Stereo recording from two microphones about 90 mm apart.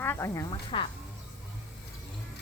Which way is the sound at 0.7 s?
70° left (ahead or behind).